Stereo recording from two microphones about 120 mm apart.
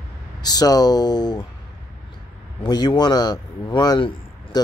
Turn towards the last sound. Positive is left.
turn(degrees=40)  # may be behind; listen again after turning